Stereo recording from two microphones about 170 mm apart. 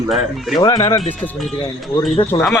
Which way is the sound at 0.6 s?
30° left (ahead or behind).